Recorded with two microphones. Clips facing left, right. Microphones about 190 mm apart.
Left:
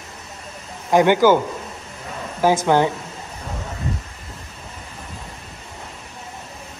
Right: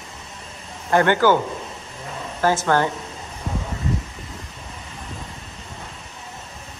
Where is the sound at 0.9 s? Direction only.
10° left (ahead or behind).